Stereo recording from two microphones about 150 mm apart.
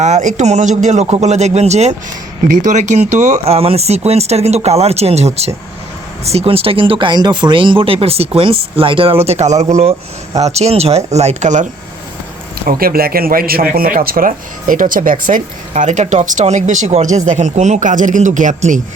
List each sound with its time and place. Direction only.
0.0 s speech: 55° right (ahead or behind)
12.5 s speech: 80° right; by 18.8 s 55° right (ahead or behind)